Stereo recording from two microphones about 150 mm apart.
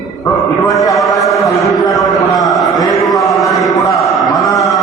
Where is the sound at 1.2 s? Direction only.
Centre (ahead or behind).